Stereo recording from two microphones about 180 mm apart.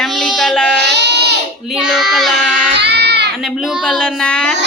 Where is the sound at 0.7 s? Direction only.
70° right (ahead or behind).